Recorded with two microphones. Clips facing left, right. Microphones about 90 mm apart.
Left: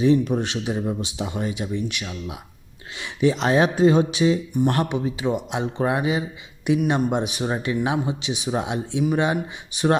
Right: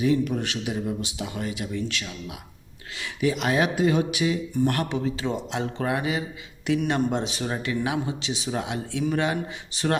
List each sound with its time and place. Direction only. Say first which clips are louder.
0.0 s speech: left 4 dB; 25° left (ahead or behind)